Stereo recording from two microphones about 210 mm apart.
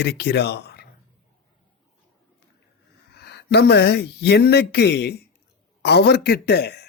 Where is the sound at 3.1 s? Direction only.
50° left (ahead or behind).